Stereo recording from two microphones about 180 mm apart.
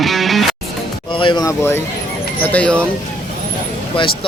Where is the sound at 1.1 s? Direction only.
25° left (ahead or behind).